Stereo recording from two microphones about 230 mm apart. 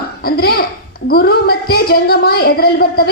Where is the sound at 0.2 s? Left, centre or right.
Left.